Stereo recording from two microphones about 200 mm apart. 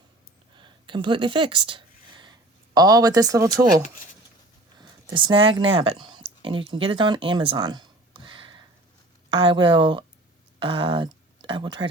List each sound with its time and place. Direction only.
0.5 s a sound: 25° right (ahead or behind)
2.7 s speech: 20° right (ahead or behind)
4.8 s speech: 20° right (ahead or behind)